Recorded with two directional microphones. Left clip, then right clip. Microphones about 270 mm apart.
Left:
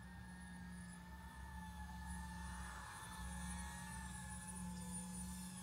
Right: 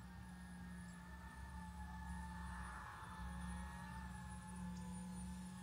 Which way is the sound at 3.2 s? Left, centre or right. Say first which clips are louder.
Left 1 dB; centre.